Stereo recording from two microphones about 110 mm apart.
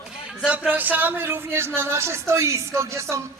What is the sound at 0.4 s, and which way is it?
A woman's voice, 10° right (ahead or behind).